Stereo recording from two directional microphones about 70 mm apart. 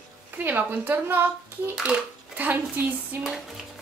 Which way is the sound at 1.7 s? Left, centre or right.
Centre.